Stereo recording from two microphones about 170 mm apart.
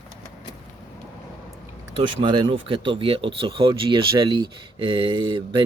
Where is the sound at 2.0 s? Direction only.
30° right (ahead or behind).